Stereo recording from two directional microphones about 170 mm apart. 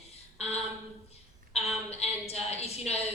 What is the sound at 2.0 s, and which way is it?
A woman's voice, 40° left (ahead or behind).